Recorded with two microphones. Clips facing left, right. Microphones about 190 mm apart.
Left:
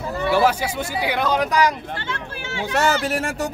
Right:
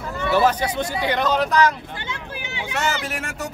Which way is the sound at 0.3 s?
10° left (ahead or behind).